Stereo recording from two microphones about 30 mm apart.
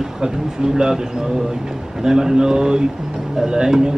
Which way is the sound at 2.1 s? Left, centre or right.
Centre.